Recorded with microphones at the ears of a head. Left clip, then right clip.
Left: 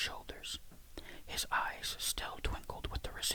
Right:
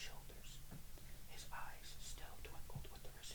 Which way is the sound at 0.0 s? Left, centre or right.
Left.